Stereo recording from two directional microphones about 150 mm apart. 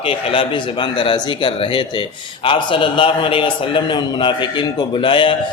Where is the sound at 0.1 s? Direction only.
35° left (ahead or behind).